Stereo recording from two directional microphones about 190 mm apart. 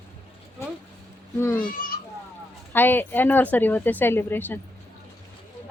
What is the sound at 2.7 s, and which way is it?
Speech, 10° left (ahead or behind).